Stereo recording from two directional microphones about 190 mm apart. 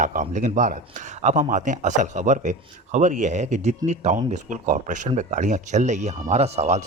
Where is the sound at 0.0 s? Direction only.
45° right (ahead or behind).